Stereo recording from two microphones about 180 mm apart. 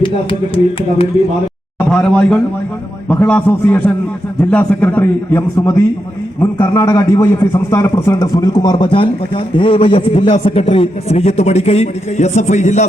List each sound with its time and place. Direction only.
0.0 s a man's voice: 30° left (ahead or behind)
1.9 s a man's voice: 5° left (ahead or behind); by 12.8 s 40° left (ahead or behind)